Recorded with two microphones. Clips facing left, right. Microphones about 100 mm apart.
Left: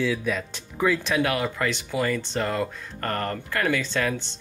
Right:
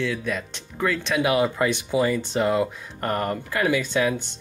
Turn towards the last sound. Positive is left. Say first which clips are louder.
# right 3 dB
turn(degrees=-10)  # may be behind; listen again after turning